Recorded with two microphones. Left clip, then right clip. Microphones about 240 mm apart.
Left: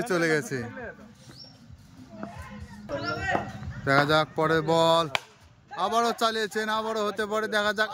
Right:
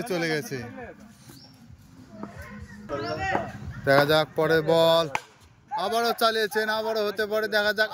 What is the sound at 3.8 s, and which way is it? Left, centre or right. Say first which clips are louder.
A man's voice: right 2 dB; centre.